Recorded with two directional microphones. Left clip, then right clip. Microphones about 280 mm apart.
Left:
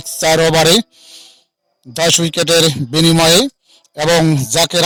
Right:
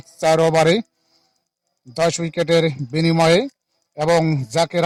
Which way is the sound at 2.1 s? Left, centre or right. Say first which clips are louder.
Left 11 dB; left.